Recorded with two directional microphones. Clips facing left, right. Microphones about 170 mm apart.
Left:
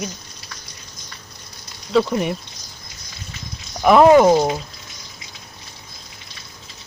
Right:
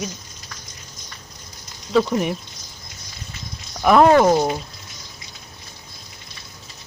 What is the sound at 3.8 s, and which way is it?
Speech, 5° left (ahead or behind).